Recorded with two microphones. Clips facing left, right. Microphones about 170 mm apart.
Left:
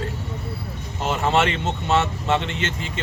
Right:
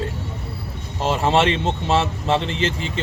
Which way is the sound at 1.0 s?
30° right (ahead or behind).